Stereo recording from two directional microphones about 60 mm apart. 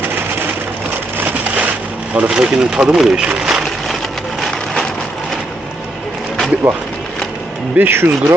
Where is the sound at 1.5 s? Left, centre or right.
Centre.